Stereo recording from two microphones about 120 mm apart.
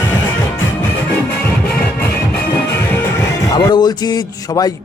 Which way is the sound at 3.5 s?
35° left (ahead or behind).